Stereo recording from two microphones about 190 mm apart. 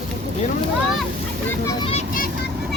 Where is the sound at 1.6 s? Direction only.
30° left (ahead or behind).